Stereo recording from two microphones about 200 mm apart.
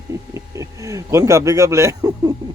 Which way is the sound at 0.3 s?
15° right (ahead or behind).